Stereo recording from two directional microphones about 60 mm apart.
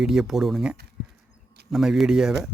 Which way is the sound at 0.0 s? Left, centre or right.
Centre.